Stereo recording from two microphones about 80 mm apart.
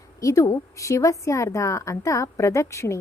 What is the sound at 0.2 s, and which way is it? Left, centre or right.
A woman's voice, left.